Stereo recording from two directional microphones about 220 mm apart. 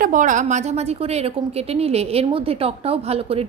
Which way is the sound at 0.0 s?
35° right (ahead or behind).